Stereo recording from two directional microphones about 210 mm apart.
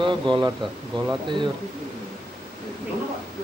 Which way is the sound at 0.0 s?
20° right (ahead or behind).